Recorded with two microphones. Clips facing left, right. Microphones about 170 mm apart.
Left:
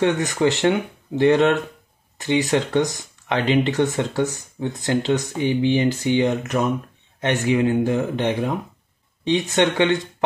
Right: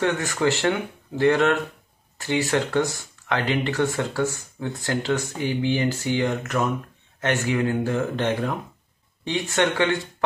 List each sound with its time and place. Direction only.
0.0 s speech: 20° left (ahead or behind)